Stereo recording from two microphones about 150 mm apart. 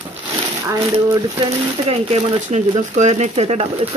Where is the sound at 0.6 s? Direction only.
20° right (ahead or behind).